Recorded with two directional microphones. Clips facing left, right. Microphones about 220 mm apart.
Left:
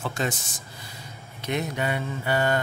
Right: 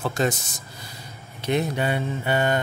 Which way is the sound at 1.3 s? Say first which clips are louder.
Right 4 dB; 30° right (ahead or behind).